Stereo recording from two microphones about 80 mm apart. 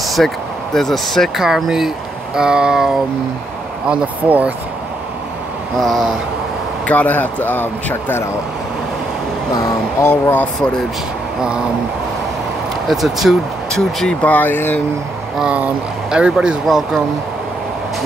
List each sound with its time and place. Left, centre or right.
0.0 s a sound: centre
0.7 s speech: centre
5.8 s speech: centre
6.9 s a man's voice: left
10.0 s a man's voice: left
12.8 s speech: centre
14.2 s a man's voice: left
15.3 s speech: centre